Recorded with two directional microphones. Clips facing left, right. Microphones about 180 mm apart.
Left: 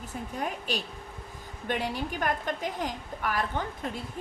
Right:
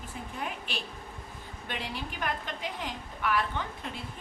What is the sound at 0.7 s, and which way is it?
A woman's voice, 40° left (ahead or behind).